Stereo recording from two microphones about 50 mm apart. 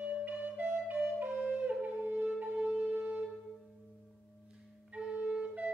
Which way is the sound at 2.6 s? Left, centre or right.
Right.